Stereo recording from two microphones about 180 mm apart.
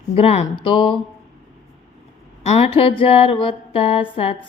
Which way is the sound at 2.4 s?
35° left (ahead or behind).